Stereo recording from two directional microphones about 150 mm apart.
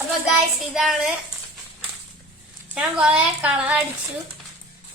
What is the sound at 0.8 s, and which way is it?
Speech, centre (ahead or behind).